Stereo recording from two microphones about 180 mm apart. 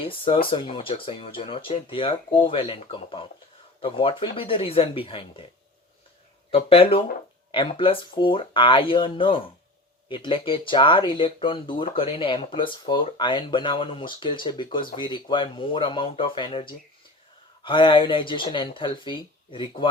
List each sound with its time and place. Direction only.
0.0 s speech: 30° left (ahead or behind)
6.5 s speech: 30° left (ahead or behind)